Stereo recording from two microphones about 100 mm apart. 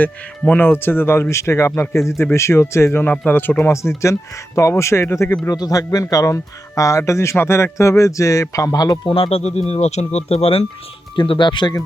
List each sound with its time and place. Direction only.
0.0 s speech: 15° left (ahead or behind)
5.5 s speech: 40° left (ahead or behind)
9.0 s speech: 70° left (ahead or behind)
11.1 s speech: 50° left (ahead or behind)